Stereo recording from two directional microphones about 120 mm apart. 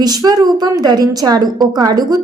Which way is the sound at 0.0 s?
35° right (ahead or behind).